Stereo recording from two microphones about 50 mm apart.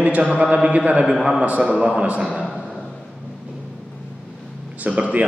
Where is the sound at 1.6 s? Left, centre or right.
Centre.